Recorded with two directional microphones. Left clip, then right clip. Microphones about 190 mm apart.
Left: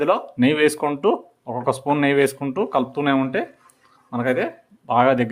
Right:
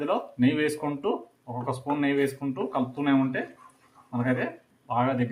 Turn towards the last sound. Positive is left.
turn(degrees=65)  # may be behind; listen again after turning